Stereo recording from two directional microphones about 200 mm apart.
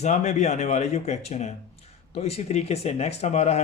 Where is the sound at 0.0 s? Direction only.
35° left (ahead or behind).